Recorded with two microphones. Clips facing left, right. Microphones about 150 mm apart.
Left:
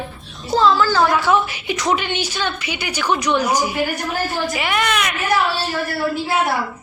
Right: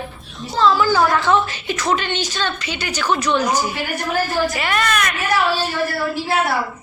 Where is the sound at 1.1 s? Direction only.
10° left (ahead or behind).